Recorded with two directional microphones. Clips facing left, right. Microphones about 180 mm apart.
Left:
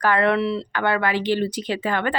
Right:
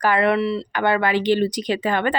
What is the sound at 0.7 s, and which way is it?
Speech, 15° right (ahead or behind).